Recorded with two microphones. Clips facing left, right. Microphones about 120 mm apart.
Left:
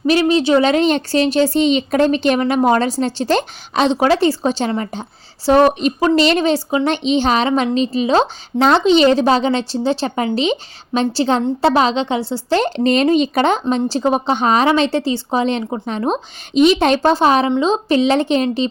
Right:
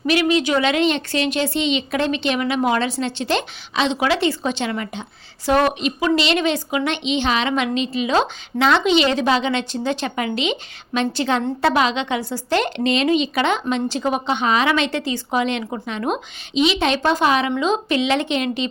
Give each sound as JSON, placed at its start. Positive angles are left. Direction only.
{"t": 0.0, "sound": "speech", "side_deg": 35}
{"t": 16.6, "sound": "speech", "side_deg": 45}